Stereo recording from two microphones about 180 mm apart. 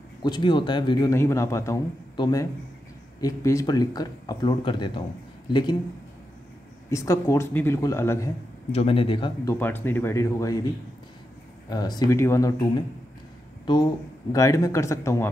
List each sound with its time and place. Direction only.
0.2 s a man's voice: 25° left (ahead or behind)
6.9 s speech: 15° left (ahead or behind)
8.7 s a man's voice: 30° left (ahead or behind)
9.5 s speech: 10° left (ahead or behind)
11.7 s a man's voice: 20° left (ahead or behind)
14.3 s speech: 20° left (ahead or behind)